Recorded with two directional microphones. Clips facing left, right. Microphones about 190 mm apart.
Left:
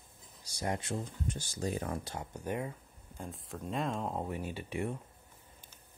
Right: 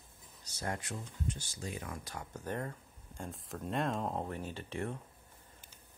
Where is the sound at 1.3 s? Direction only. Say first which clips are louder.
Left 7 dB; 40° left (ahead or behind).